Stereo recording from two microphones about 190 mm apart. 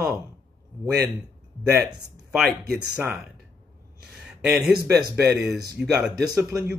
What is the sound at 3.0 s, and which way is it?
Speech, 5° right (ahead or behind).